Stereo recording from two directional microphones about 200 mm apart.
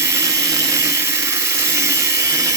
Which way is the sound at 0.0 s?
15° right (ahead or behind).